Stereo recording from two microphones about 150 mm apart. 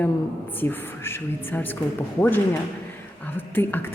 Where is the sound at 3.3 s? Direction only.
15° left (ahead or behind).